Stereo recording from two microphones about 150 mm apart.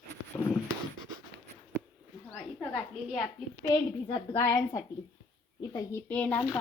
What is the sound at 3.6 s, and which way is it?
A woman's voice, 25° left (ahead or behind).